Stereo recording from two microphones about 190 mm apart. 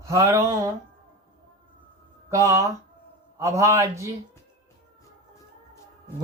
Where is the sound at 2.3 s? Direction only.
15° right (ahead or behind).